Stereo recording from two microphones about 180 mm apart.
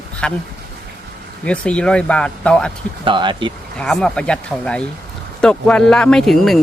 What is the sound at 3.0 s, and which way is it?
Speech, 25° right (ahead or behind).